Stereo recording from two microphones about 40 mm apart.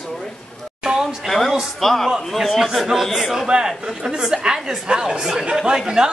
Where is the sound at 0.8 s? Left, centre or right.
Centre.